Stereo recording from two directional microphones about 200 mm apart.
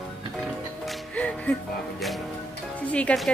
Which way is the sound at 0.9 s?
5° left (ahead or behind).